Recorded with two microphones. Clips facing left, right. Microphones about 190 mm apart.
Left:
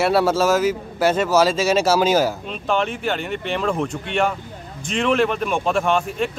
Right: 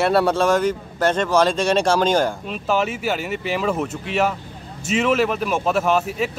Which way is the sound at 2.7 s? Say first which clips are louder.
Even; 5° right (ahead or behind).